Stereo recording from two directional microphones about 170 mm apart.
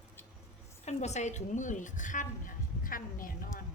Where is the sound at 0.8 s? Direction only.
40° left (ahead or behind); by 3.6 s 55° left (ahead or behind).